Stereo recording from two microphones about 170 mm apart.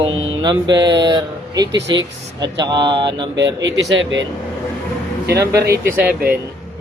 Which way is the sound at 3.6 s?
90° right.